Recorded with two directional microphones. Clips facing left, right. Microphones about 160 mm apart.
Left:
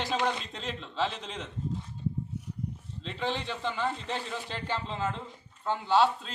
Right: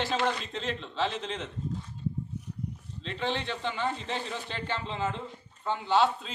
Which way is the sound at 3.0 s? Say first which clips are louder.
Right 1 dB; 5° left (ahead or behind).